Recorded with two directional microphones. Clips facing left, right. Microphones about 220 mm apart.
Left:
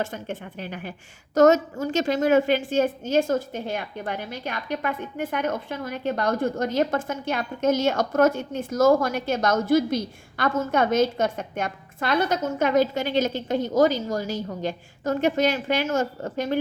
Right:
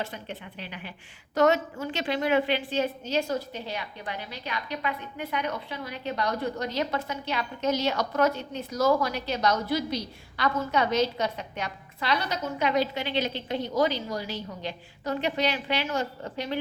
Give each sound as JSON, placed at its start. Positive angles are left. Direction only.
{"t": 0.0, "sound": "a woman's voice", "side_deg": 45}